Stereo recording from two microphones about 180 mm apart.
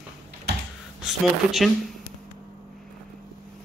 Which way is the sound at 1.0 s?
Centre (ahead or behind).